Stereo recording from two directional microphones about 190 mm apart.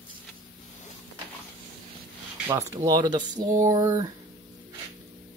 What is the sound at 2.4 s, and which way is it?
Speech, 20° right (ahead or behind).